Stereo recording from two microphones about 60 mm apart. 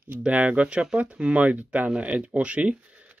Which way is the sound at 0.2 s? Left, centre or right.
Right.